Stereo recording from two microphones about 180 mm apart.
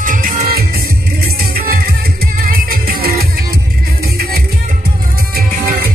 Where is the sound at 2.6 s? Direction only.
55° right (ahead or behind).